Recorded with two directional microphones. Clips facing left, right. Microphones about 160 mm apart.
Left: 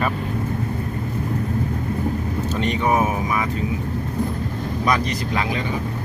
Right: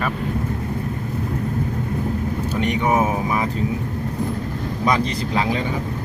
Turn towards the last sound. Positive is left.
turn(degrees=-25)  # may be behind; listen again after turning